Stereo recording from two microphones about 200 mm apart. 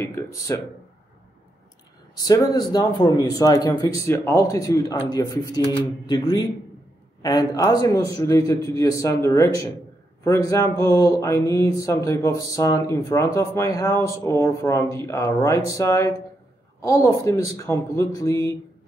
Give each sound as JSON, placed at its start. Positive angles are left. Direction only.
{"t": 0.0, "sound": "speech", "side_deg": 15}
{"t": 2.1, "sound": "mantra", "side_deg": 20}
{"t": 5.0, "sound": "a man's voice", "side_deg": 20}
{"t": 7.2, "sound": "mantra", "side_deg": 20}